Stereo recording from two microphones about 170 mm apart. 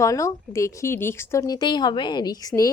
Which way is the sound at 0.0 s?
20° left (ahead or behind).